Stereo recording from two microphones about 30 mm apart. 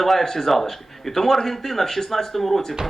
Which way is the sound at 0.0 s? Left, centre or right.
Centre.